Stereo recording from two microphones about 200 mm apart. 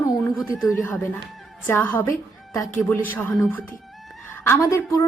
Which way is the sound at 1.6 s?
10° left (ahead or behind).